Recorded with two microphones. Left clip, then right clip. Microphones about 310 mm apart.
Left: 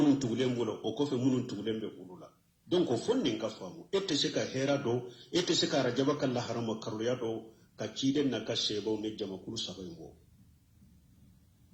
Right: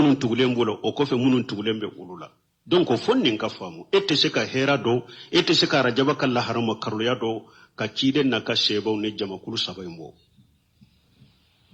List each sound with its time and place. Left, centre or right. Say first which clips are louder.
0.0 s speech: right 9 dB; right